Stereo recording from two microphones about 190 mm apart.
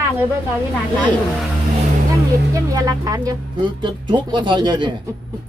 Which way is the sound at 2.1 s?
20° right (ahead or behind).